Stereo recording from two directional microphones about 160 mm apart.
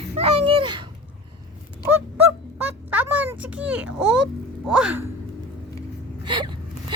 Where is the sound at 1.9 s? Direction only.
10° right (ahead or behind).